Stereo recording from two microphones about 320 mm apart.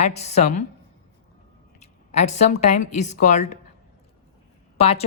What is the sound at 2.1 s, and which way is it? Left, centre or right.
Speech, left.